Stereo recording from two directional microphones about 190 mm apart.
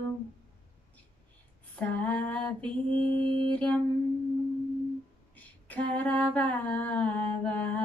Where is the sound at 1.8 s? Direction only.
10° left (ahead or behind).